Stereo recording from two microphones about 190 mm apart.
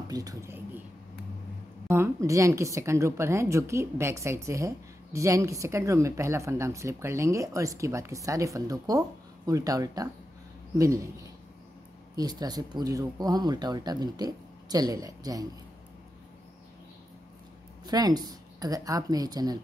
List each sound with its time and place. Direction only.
0.1 s a sound: 20° right (ahead or behind)
1.9 s a woman's voice: 15° right (ahead or behind)
12.2 s speech: 20° right (ahead or behind)
17.8 s speech: 20° right (ahead or behind)